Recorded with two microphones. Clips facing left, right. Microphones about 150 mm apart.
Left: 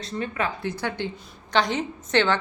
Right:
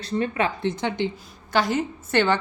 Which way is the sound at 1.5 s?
5° right (ahead or behind).